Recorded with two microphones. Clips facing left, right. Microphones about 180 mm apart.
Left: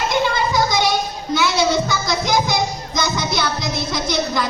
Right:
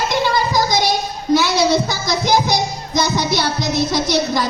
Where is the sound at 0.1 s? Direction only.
35° right (ahead or behind).